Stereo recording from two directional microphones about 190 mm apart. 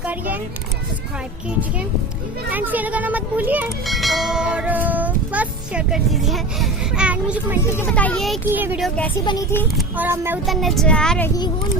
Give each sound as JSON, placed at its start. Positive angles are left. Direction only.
{"t": 0.0, "sound": "a sound", "side_deg": -10}
{"t": 2.5, "sound": "speech", "side_deg": -10}
{"t": 7.8, "sound": "a child's voice", "side_deg": 10}
{"t": 8.5, "sound": "speech", "side_deg": -10}
{"t": 9.2, "sound": "a child's voice", "side_deg": 20}
{"t": 9.7, "sound": "speech", "side_deg": -10}
{"t": 10.4, "sound": "speech", "side_deg": 0}